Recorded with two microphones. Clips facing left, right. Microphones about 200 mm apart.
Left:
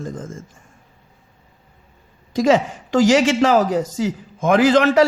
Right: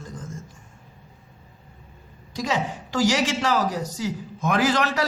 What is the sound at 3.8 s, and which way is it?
Speech, 90° left.